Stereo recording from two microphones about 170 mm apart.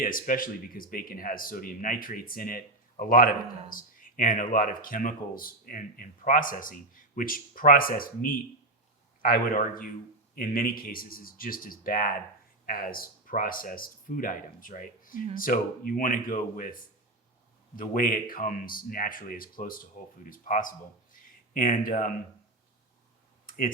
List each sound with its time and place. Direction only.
0.0 s speech: 55° left (ahead or behind)
17.7 s speech: 55° left (ahead or behind)
23.5 s computer keyboard: 55° left (ahead or behind)